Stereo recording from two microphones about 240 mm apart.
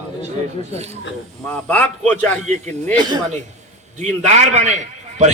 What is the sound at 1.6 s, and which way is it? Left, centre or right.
Speech, centre.